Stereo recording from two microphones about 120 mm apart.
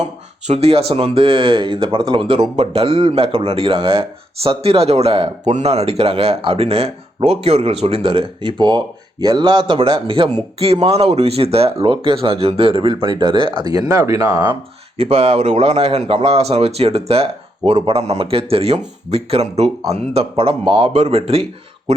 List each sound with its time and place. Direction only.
0.0 s speech: 65° right (ahead or behind)
5.5 s speech: 70° right (ahead or behind); by 10.2 s 45° right (ahead or behind)
10.6 s speech: 55° right (ahead or behind); by 14.4 s 30° right (ahead or behind)
14.9 s speech: 55° right (ahead or behind)